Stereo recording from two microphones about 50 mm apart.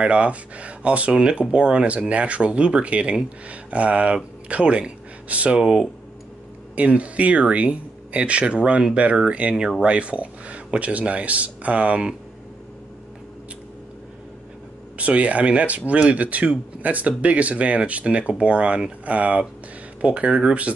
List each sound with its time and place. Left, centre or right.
0.0 s speech: right
5.6 s speech: centre
6.7 s speech: right
15.0 s speech: right